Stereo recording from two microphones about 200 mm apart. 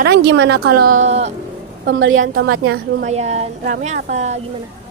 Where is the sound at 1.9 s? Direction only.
75° right (ahead or behind).